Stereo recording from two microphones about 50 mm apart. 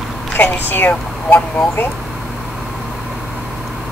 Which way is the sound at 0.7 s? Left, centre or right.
Left.